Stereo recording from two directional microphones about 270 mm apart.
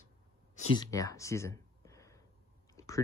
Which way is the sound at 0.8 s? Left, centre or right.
Centre.